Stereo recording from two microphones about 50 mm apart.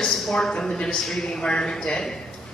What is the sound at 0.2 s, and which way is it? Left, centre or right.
Speech, centre.